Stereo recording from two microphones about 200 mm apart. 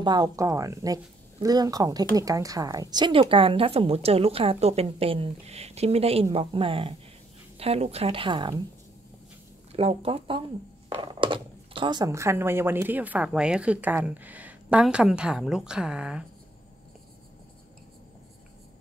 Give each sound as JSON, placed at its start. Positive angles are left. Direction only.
{"t": 0.0, "sound": "speech", "side_deg": -20}
{"t": 9.7, "sound": "speech", "side_deg": -30}